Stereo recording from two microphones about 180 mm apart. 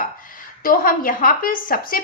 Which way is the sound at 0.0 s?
50° left (ahead or behind).